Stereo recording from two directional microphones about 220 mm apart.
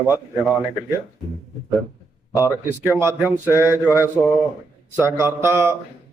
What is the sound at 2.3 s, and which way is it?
Speech, 15° left (ahead or behind).